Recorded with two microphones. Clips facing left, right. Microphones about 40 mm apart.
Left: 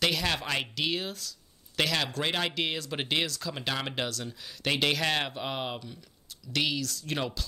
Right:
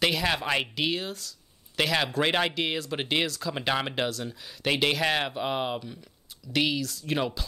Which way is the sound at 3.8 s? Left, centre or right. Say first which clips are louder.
Right 4 dB; centre.